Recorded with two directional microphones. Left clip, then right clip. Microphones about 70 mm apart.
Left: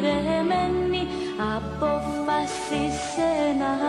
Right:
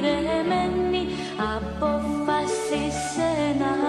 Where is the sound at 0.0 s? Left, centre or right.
Left.